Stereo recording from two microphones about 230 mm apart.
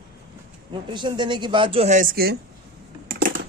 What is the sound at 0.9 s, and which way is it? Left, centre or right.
A woman's voice, centre.